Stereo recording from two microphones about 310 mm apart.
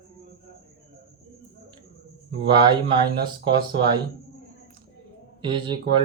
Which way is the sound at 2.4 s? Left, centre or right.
Centre.